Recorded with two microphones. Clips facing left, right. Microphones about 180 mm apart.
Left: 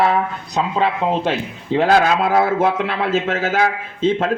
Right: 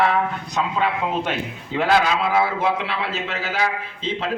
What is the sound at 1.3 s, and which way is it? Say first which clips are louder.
A man's voice: left 6 dB; 40° left (ahead or behind).